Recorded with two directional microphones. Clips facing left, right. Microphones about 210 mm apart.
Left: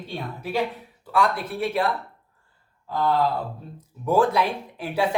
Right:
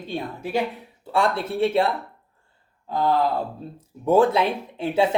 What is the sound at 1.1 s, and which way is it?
A man's voice, 25° right (ahead or behind).